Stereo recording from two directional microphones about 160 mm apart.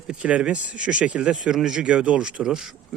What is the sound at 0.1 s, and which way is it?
Speech, 5° right (ahead or behind).